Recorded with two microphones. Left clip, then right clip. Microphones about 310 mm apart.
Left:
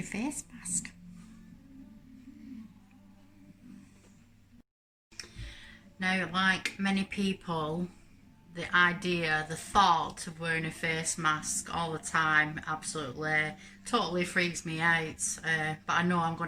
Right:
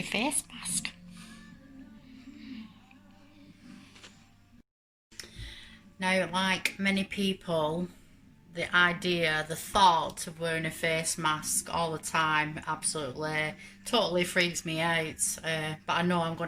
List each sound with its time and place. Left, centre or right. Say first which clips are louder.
0.1 s speech: right 7 dB; centre
5.1 s speech: right 1 dB; centre